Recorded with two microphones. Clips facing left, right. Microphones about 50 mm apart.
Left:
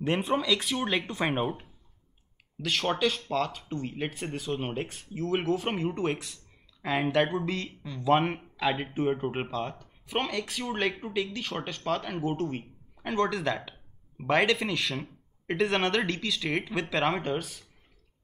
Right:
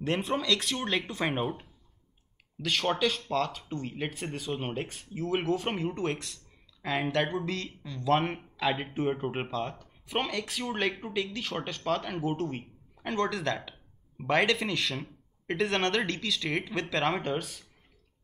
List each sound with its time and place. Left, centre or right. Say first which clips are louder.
0.0 s speech: left 2 dB; centre